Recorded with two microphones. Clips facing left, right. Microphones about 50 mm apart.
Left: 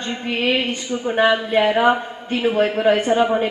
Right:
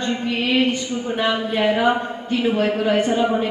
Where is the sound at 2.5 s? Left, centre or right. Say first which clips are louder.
Left 4 dB; left.